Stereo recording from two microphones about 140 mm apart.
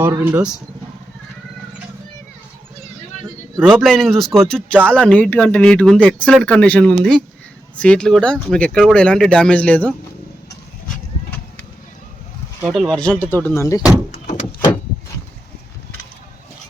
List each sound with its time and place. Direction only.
0.2 s speech: 15° right (ahead or behind)
3.8 s speech: centre (ahead or behind)
12.6 s speech: centre (ahead or behind); by 13.8 s 20° left (ahead or behind)
14.1 s door: 60° left (ahead or behind)